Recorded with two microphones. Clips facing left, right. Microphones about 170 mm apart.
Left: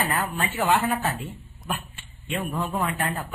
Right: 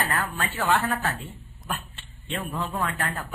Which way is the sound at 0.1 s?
20° left (ahead or behind).